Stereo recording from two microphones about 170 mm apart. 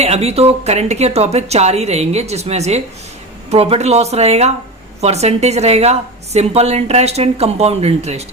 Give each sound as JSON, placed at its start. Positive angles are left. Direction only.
{"t": 0.0, "sound": "a woman's voice", "side_deg": -40}